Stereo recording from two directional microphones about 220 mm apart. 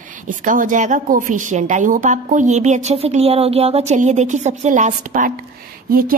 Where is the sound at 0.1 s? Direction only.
35° right (ahead or behind).